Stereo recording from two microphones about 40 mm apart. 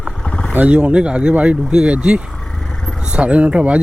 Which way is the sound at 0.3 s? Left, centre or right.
Left.